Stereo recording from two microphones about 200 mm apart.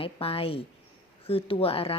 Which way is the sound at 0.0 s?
30° left (ahead or behind).